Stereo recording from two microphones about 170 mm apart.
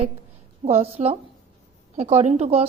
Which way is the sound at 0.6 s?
35° right (ahead or behind).